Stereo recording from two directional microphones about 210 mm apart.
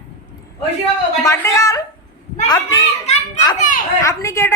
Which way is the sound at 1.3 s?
15° left (ahead or behind).